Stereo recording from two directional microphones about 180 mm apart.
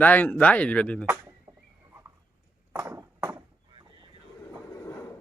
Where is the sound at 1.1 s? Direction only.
15° right (ahead or behind).